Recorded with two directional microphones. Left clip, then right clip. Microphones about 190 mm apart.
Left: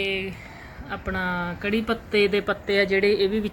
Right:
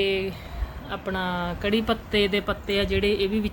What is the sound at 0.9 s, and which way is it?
Speech, 10° right (ahead or behind).